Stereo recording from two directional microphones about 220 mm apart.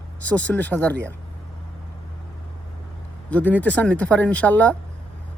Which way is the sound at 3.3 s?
5° left (ahead or behind).